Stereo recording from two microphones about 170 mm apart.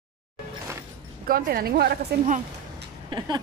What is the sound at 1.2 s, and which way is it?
A woman's voice, 60° right (ahead or behind).